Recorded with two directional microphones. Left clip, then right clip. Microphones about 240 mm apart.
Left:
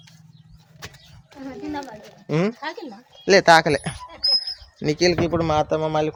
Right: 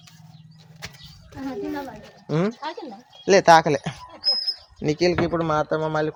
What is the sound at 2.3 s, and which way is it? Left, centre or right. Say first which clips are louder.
Speech: left 2 dB; centre.